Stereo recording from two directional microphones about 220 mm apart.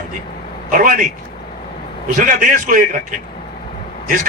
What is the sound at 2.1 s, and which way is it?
A man's voice, 35° right (ahead or behind).